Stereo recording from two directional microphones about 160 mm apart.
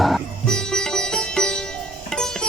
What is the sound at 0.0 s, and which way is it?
Sitar, centre (ahead or behind).